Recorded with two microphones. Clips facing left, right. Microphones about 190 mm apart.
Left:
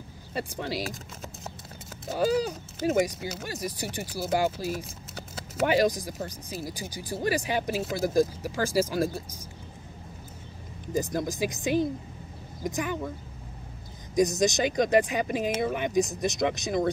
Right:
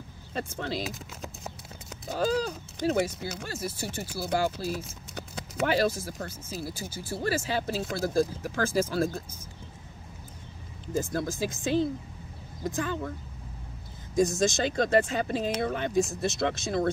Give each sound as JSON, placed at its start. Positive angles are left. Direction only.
{"t": 0.3, "sound": "speech", "side_deg": 10}
{"t": 0.9, "sound": "speech", "side_deg": 0}
{"t": 2.1, "sound": "speech", "side_deg": 15}
{"t": 10.9, "sound": "speech", "side_deg": 15}
{"t": 14.1, "sound": "speech", "side_deg": 20}